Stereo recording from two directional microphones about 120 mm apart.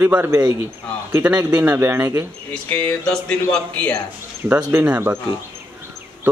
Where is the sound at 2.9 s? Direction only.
10° left (ahead or behind).